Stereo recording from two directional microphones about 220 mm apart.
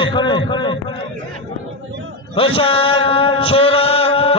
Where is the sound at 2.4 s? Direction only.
25° left (ahead or behind).